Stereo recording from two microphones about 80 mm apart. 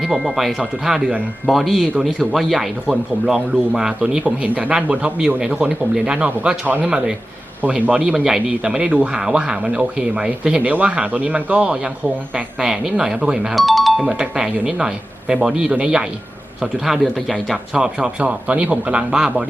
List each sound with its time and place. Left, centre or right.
0.0 s a man's voice: centre
17.7 s speech: centre